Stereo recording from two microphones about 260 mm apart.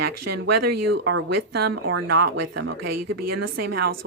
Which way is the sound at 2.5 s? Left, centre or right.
Right.